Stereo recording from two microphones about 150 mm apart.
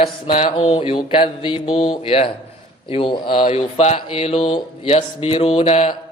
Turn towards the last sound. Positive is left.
turn(degrees=40)  # may be behind; listen again after turning